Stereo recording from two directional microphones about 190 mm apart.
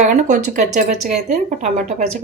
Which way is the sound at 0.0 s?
40° right (ahead or behind).